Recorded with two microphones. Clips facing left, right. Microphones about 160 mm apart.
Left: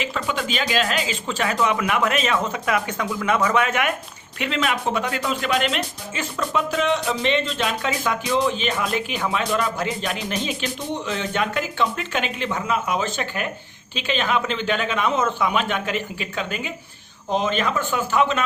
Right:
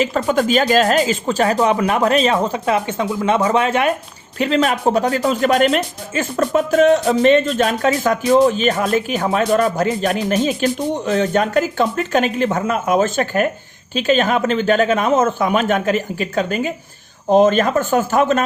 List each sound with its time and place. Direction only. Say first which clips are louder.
0.0 s speech: right 9 dB; 40° right (ahead or behind)